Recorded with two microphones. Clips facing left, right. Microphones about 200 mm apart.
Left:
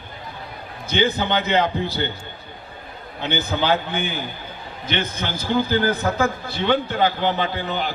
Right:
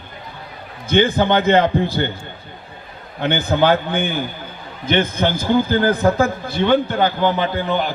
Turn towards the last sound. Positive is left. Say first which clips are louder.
# right 5 dB
turn(degrees=-50)  # may be behind; listen again after turning